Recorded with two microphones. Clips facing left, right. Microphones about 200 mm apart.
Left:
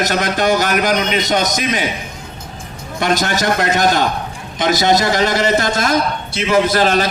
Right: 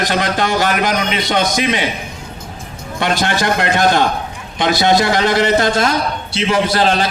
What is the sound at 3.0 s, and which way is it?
A man's voice, 45° left (ahead or behind).